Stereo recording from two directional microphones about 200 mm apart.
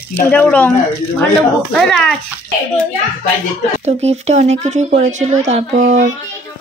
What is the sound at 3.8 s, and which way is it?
Speech, 35° right (ahead or behind).